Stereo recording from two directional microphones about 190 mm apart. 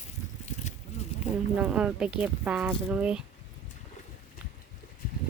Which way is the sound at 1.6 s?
5° right (ahead or behind).